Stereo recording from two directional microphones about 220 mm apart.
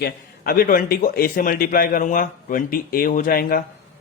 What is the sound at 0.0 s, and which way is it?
A man's voice, 40° left (ahead or behind).